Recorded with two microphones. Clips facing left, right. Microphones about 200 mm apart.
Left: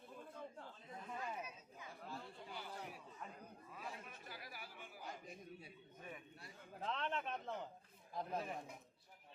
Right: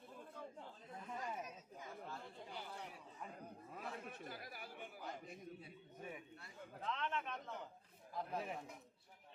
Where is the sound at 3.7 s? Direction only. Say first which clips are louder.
Right 3 dB; 55° right (ahead or behind).